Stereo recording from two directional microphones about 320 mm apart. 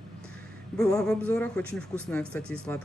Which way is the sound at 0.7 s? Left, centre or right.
Centre.